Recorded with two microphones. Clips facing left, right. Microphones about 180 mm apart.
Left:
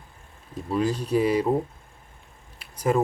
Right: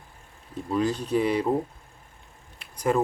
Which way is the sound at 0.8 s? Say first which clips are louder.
Left 1 dB; 35° left (ahead or behind).